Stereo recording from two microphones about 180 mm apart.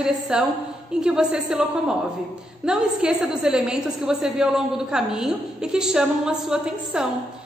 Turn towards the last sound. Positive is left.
turn(degrees=-5)  # may be behind; listen again after turning